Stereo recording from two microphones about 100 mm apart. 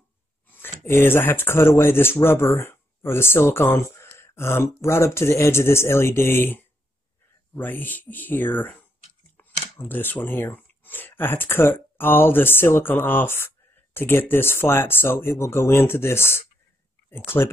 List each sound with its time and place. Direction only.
0.5 s speech: 20° left (ahead or behind)